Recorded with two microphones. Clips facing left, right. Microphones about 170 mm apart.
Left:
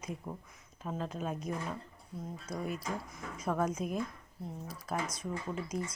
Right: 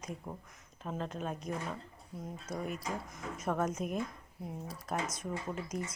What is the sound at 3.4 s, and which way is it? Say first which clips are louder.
Speech: left 1 dB; centre (ahead or behind).